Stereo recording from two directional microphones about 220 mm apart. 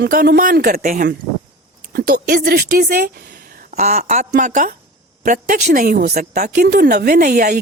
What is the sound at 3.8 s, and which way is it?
A woman's voice, 30° right (ahead or behind).